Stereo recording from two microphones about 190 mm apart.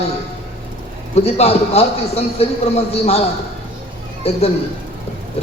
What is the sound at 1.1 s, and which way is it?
A man's voice, 35° left (ahead or behind).